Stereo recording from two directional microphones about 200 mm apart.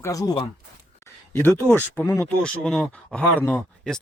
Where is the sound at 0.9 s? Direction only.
10° left (ahead or behind).